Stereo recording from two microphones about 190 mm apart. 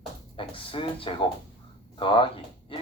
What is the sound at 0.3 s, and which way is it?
Speech, 30° left (ahead or behind).